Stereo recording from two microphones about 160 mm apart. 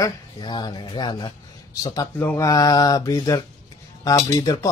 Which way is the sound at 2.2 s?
10° left (ahead or behind).